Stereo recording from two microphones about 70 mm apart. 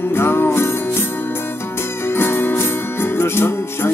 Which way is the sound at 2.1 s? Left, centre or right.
Left.